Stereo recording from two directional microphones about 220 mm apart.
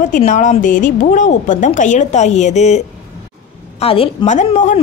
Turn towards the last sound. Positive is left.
turn(degrees=30)  # may be behind; listen again after turning